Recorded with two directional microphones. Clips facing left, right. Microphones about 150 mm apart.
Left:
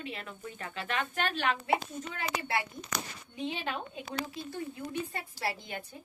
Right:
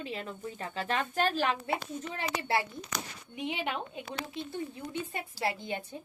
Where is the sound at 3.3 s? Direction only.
20° right (ahead or behind).